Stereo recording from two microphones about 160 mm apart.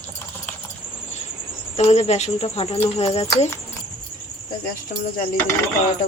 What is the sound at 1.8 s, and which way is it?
Speech, 40° left (ahead or behind).